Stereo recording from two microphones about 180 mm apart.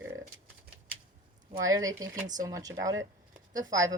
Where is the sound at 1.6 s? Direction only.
20° right (ahead or behind).